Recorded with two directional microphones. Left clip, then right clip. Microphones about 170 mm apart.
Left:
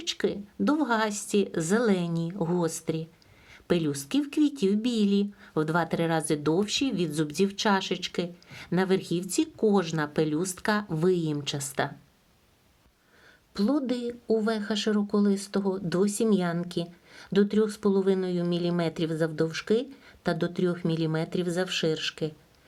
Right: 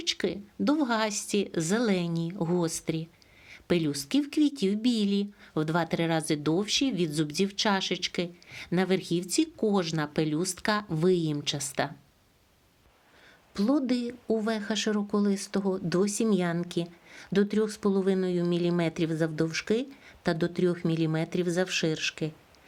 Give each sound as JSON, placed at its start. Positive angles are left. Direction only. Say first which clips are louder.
{"t": 0.0, "sound": "speech", "louder": "left 1 dB", "side_deg": -25}
{"t": 13.5, "sound": "speech", "louder": "even", "side_deg": -25}